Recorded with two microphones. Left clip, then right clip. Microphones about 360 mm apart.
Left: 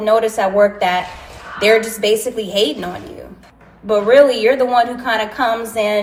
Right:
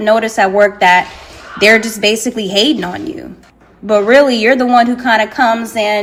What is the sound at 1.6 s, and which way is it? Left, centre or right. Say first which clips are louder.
A woman's voice: right 4 dB; right.